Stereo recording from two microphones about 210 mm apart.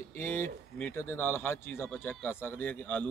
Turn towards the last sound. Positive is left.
turn(degrees=5)  # may be behind; listen again after turning